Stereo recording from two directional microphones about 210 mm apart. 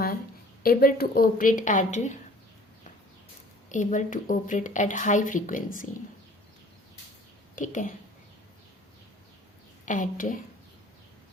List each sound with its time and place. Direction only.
0.6 s a woman's voice: 45° left (ahead or behind)
3.7 s a woman's voice: 35° left (ahead or behind)
7.5 s speech: 35° left (ahead or behind)
9.8 s a woman's voice: 40° left (ahead or behind)